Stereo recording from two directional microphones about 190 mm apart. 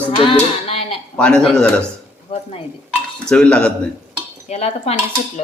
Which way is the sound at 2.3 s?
25° left (ahead or behind).